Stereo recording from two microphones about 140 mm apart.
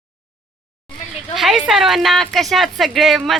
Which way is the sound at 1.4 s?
Centre (ahead or behind).